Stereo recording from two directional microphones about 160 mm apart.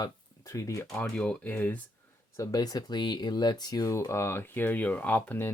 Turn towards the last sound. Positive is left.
turn(degrees=10)  # may be behind; listen again after turning